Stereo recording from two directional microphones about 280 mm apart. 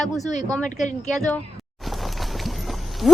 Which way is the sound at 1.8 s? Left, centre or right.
Centre.